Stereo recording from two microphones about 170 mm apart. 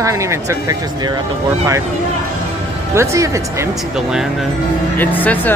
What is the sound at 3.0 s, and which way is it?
Speech, 15° right (ahead or behind).